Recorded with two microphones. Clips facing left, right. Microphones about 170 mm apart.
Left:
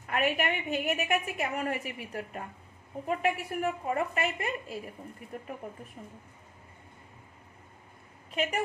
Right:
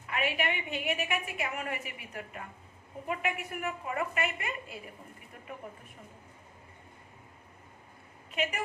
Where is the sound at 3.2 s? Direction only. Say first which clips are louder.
Left 7 dB; 35° left (ahead or behind).